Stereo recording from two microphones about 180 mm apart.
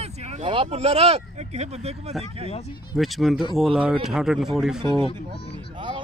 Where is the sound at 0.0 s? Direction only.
35° right (ahead or behind).